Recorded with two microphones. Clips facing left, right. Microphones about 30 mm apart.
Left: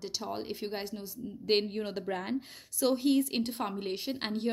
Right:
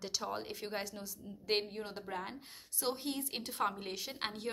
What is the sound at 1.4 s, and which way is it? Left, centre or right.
Speech, left.